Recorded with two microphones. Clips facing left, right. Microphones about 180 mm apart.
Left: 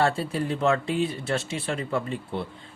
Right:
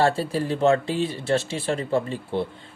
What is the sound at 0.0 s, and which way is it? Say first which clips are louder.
Speech: right 3 dB; 35° right (ahead or behind).